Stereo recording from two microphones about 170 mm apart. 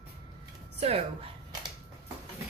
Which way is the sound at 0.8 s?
35° right (ahead or behind).